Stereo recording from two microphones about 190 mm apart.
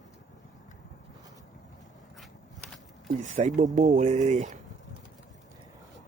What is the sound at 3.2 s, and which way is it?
Speech, 40° right (ahead or behind).